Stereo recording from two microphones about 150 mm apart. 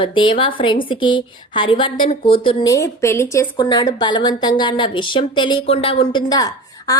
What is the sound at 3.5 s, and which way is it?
Speech, 30° left (ahead or behind).